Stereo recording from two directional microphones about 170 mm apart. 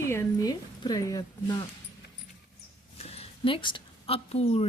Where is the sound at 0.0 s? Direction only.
15° left (ahead or behind).